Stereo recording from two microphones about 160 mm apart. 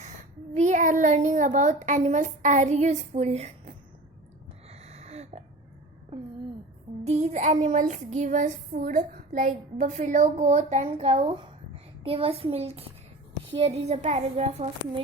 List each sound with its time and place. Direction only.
0.5 s speech: 45° right (ahead or behind)
4.7 s a sound: 40° right (ahead or behind)
7.0 s child singing: 45° right (ahead or behind)
12.0 s a child's voice: 35° right (ahead or behind)